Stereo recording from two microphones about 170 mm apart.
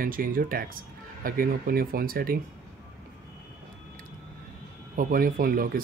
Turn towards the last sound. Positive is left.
turn(degrees=-55)  # may be behind; listen again after turning